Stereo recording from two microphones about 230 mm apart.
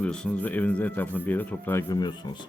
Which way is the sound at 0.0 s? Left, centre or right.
Centre.